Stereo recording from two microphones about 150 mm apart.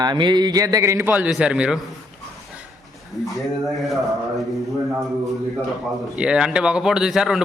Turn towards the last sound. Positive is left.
turn(degrees=-5)  # may be behind; listen again after turning